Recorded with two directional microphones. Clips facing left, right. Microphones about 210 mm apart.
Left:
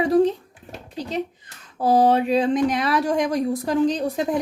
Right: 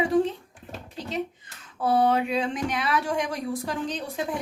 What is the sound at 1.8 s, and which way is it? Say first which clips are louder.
A woman's voice: left 5 dB; 35° left (ahead or behind).